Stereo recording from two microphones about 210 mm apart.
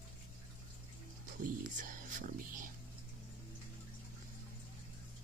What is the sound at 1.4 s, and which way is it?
Speech, 40° right (ahead or behind).